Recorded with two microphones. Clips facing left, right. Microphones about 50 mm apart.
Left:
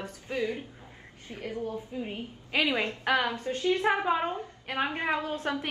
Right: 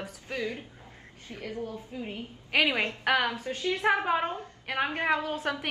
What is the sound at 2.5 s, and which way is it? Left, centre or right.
Speech, right.